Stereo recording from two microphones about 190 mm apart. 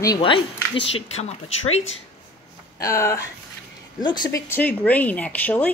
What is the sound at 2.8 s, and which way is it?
Speech, 15° left (ahead or behind).